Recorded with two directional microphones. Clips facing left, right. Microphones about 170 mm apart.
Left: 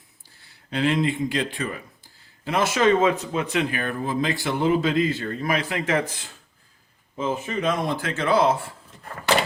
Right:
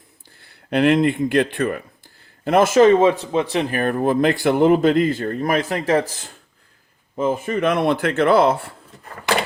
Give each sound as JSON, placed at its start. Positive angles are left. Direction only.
{"t": 0.4, "sound": "speech", "side_deg": -60}
{"t": 3.0, "sound": "speech", "side_deg": -30}
{"t": 3.9, "sound": "a man's voice", "side_deg": -60}
{"t": 7.2, "sound": "speech", "side_deg": -55}